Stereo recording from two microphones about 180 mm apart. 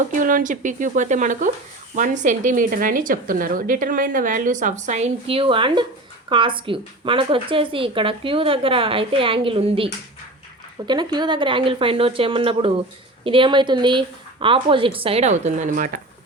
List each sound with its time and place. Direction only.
0.1 s a woman's voice: 50° right (ahead or behind)